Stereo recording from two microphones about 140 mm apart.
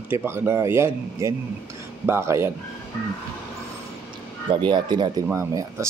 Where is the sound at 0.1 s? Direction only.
15° right (ahead or behind).